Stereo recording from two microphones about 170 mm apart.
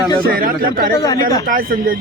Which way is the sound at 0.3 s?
55° right (ahead or behind).